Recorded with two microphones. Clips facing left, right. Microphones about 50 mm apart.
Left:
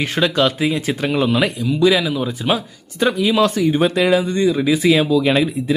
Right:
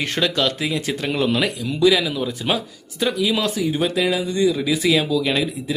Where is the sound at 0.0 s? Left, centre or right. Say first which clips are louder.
Left 3 dB; centre.